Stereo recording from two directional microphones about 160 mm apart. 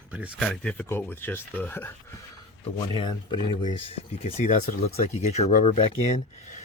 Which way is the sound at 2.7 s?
30° left (ahead or behind).